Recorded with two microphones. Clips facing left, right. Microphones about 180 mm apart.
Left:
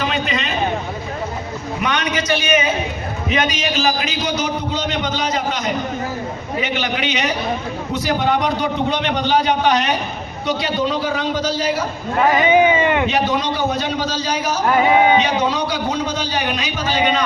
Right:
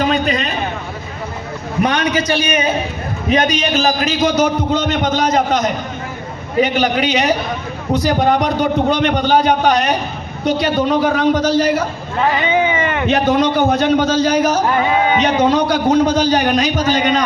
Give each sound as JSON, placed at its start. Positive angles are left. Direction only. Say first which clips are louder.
{"t": 0.0, "sound": "a sound", "louder": "right 5 dB", "side_deg": -40}
{"t": 1.8, "sound": "a man's voice", "louder": "right 6 dB", "side_deg": -35}
{"t": 12.3, "sound": "speech", "louder": "left 4 dB", "side_deg": 15}
{"t": 13.1, "sound": "a man's voice", "louder": "right 5 dB", "side_deg": -55}